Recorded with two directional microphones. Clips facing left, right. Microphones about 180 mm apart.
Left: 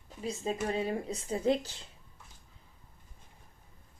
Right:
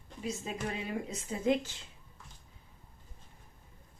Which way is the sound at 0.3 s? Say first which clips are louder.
Left 4 dB; 30° left (ahead or behind).